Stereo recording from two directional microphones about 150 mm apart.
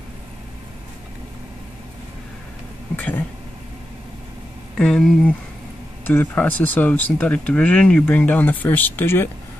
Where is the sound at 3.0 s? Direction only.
10° left (ahead or behind).